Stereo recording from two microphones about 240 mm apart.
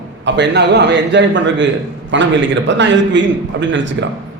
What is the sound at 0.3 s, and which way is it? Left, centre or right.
A man's voice, right.